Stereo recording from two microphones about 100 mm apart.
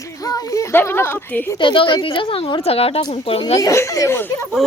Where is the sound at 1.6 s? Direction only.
60° left (ahead or behind); by 3.0 s 80° left.